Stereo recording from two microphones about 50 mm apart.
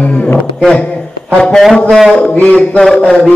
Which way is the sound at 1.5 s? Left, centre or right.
Centre.